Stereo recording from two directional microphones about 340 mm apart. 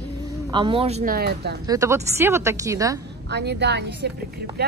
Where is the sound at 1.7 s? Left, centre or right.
Centre.